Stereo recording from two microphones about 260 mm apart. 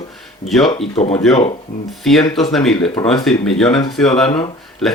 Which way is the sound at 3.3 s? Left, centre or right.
Centre.